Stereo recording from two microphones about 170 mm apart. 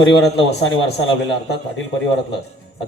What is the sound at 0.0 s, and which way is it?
Speech, 90° left.